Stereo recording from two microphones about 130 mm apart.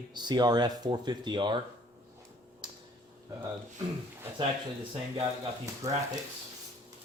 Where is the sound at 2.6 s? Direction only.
35° right (ahead or behind).